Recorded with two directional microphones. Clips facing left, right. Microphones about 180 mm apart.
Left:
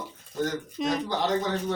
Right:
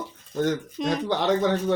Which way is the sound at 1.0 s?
65° right (ahead or behind).